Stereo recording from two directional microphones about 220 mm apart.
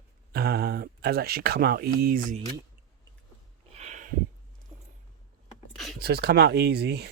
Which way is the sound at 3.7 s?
30° right (ahead or behind).